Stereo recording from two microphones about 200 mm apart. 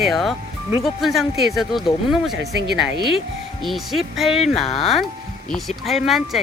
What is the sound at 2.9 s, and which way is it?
Speech, 25° left (ahead or behind).